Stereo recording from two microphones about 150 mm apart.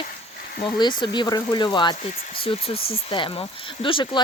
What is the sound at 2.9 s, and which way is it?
Speech, 35° left (ahead or behind).